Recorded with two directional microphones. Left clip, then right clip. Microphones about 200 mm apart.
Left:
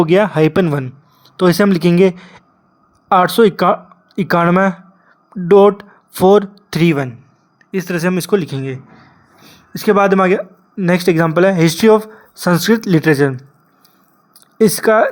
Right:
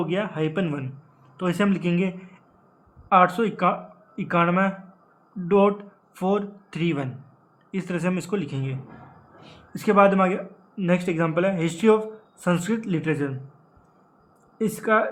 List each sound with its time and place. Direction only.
0.0 s speech: 45° left (ahead or behind)
14.6 s speech: 40° left (ahead or behind)